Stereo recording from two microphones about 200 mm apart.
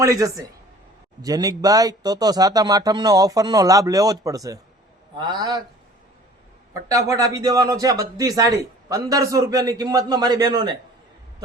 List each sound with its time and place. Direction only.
0.0 s speech: 15° right (ahead or behind)
6.8 s speech: 15° right (ahead or behind)